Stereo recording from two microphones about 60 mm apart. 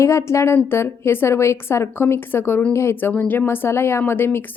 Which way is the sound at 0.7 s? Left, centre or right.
Left.